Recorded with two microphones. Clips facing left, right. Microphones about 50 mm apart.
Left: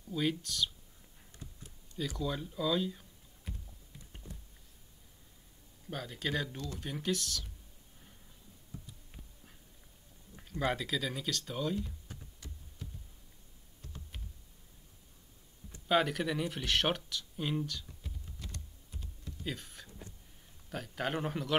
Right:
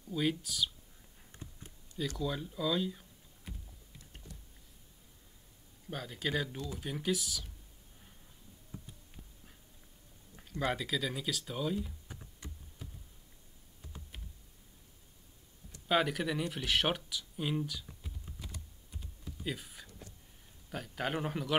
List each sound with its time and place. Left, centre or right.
0.1 s speech: centre
1.3 s a sound: right
1.9 s speech: centre
5.9 s speech: centre
10.3 s speech: centre
15.9 s a sound: centre
20.7 s speech: centre